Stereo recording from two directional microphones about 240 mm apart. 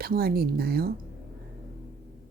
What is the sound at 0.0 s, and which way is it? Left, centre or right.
Speech, right.